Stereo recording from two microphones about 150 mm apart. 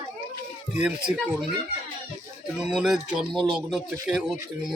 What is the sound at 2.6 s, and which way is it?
Speech, 5° right (ahead or behind).